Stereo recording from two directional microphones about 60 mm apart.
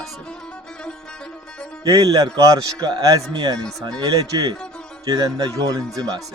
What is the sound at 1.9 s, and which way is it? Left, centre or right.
Speech, right.